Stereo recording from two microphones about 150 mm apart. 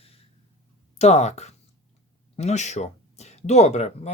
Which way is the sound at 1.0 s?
45° left (ahead or behind).